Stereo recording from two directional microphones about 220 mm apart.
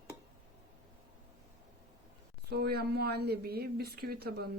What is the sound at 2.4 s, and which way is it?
Speech, 45° right (ahead or behind).